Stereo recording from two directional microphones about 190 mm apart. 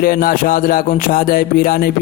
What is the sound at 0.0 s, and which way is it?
Music, 50° left (ahead or behind).